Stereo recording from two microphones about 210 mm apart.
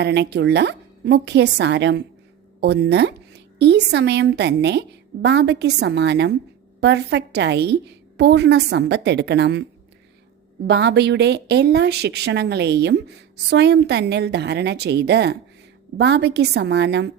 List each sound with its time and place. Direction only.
0.0 s a woman's voice: 55° right (ahead or behind)
10.7 s speech: 55° right (ahead or behind)